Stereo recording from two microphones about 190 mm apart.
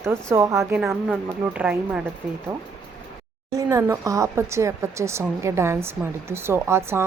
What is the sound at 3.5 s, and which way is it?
Speech, 15° right (ahead or behind).